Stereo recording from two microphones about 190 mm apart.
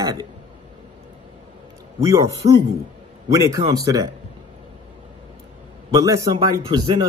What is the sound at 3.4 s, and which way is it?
Speech, 20° right (ahead or behind).